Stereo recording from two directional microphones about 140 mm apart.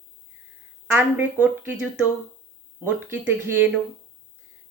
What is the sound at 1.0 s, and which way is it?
Speech, 15° right (ahead or behind).